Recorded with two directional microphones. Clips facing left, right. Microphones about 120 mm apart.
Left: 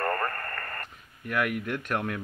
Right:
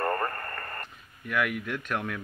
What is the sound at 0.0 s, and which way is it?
Radio, 20° right (ahead or behind).